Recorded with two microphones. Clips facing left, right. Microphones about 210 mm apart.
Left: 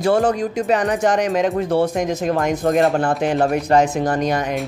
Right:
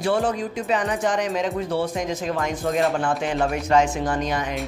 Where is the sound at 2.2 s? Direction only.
45° left (ahead or behind).